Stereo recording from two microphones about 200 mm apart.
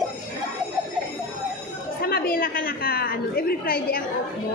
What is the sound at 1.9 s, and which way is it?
A woman's voice, 50° left (ahead or behind).